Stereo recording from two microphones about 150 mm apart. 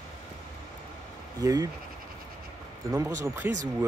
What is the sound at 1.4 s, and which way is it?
Speech, 25° right (ahead or behind).